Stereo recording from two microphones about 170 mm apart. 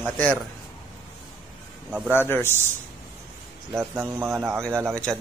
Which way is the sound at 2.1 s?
10° left (ahead or behind).